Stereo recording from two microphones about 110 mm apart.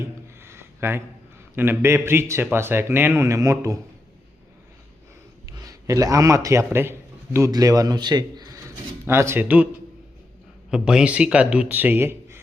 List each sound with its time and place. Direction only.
0.0 s a sound: 25° right (ahead or behind)
1.5 s a man's voice: 20° right (ahead or behind)
5.5 s a man's voice: 30° right (ahead or behind)
7.5 s a man's voice: 35° right (ahead or behind)
9.0 s a man's voice: 20° right (ahead or behind)
10.7 s speech: 5° right (ahead or behind)